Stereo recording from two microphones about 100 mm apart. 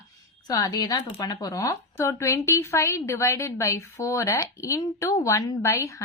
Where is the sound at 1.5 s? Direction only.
25° left (ahead or behind).